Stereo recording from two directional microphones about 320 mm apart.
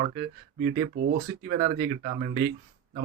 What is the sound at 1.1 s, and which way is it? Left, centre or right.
Speech, right.